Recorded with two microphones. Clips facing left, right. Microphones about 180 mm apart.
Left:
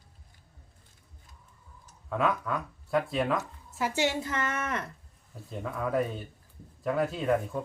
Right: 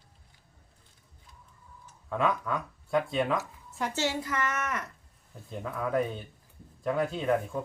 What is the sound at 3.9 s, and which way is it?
Speech, 15° left (ahead or behind).